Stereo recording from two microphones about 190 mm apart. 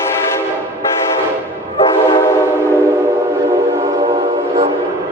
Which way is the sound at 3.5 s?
15° right (ahead or behind).